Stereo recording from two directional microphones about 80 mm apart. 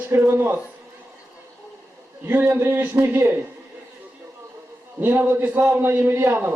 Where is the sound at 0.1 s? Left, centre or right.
Right.